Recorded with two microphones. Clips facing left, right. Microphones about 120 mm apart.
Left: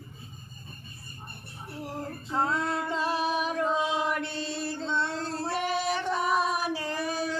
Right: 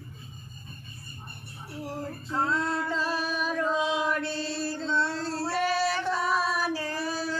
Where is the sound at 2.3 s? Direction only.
20° left (ahead or behind).